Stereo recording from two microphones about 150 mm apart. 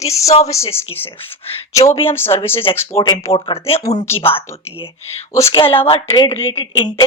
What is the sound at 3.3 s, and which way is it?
Speech, 40° left (ahead or behind).